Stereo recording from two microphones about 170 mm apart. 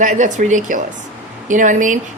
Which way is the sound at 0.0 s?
45° right (ahead or behind).